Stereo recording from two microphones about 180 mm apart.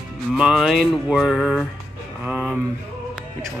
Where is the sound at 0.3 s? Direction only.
5° right (ahead or behind).